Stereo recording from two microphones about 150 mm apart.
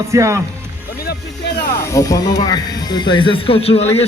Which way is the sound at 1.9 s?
20° left (ahead or behind).